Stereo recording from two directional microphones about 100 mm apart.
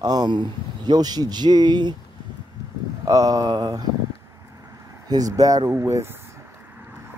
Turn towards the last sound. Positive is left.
turn(degrees=-30)  # may be behind; listen again after turning